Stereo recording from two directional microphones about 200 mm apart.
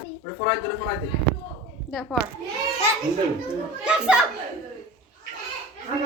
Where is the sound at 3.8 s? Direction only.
5° right (ahead or behind).